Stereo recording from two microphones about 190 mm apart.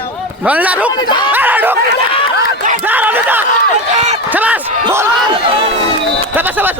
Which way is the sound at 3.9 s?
40° right (ahead or behind).